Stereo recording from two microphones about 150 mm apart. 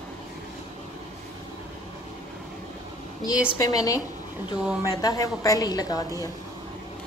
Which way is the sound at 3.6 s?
25° left (ahead or behind).